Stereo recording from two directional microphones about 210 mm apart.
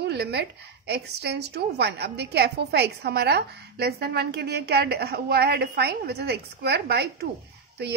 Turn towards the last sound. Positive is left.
turn(degrees=-55)  # may be behind; listen again after turning